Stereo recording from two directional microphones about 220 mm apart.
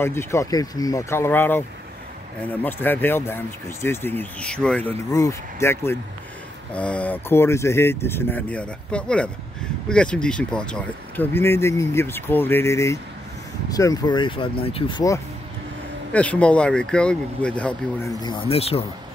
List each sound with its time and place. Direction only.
0.0 s speech: 10° left (ahead or behind)
2.6 s speech: 10° left (ahead or behind)
16.1 s speech: 5° left (ahead or behind)
18.2 s speech: 25° left (ahead or behind)